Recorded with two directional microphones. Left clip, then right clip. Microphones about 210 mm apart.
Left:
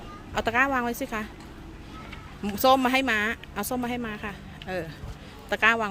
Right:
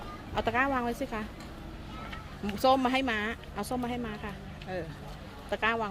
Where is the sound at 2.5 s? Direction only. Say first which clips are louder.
Left 5 dB; 25° left (ahead or behind).